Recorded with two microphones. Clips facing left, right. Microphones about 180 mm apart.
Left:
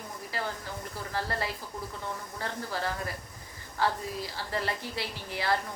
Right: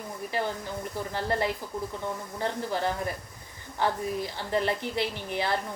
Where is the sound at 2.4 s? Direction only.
20° right (ahead or behind).